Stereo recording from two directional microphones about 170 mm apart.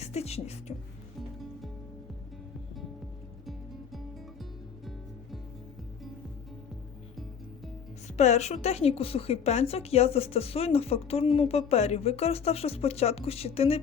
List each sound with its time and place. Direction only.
0.0 s speech: 40° left (ahead or behind)
8.0 s a woman's voice: 40° left (ahead or behind)